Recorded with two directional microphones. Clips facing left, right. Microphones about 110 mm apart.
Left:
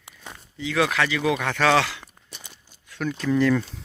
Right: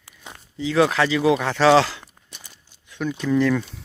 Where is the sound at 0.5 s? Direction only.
30° right (ahead or behind); by 3.4 s 10° right (ahead or behind).